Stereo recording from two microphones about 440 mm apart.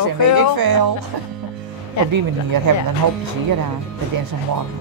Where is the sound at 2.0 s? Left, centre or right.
Left.